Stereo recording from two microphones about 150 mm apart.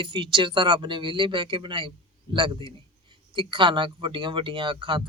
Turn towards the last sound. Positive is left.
turn(degrees=-35)  # may be behind; listen again after turning